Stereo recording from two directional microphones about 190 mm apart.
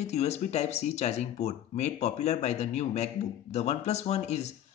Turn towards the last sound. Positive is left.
turn(degrees=35)  # may be behind; listen again after turning